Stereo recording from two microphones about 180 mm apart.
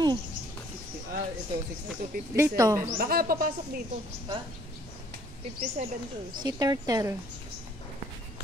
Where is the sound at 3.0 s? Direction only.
55° right (ahead or behind).